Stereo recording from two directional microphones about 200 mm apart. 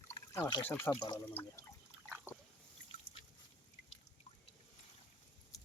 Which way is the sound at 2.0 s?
10° right (ahead or behind).